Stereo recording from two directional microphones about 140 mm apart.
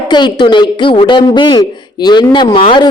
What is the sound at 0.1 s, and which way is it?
Speech, 35° left (ahead or behind).